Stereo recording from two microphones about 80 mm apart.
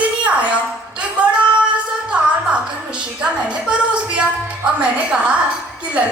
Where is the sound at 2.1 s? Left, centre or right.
Centre.